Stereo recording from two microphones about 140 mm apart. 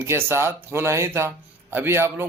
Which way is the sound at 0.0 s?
20° right (ahead or behind).